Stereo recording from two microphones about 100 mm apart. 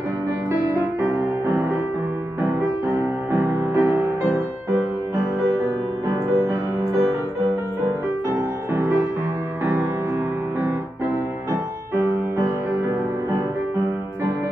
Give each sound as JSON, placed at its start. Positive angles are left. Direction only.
{"t": 3.4, "sound": "music", "side_deg": -25}
{"t": 6.0, "sound": "music", "side_deg": -35}
{"t": 11.9, "sound": "music", "side_deg": -25}